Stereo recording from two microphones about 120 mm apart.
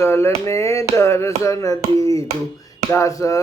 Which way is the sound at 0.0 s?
20° left (ahead or behind).